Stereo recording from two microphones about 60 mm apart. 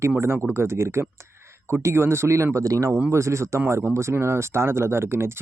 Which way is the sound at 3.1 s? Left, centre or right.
Right.